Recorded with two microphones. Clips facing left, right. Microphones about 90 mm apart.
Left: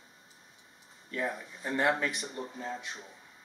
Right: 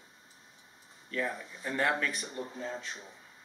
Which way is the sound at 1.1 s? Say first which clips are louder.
Even; 20° left (ahead or behind).